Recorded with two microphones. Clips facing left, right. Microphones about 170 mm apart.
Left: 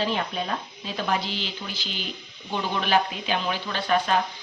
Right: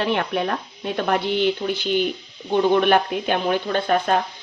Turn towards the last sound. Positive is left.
turn(degrees=-45)  # may be behind; listen again after turning